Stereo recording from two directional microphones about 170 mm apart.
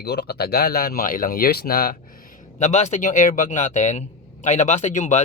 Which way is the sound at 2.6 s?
40° left (ahead or behind).